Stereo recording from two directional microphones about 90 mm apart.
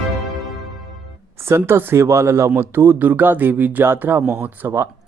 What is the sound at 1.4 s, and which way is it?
Speech, 30° right (ahead or behind).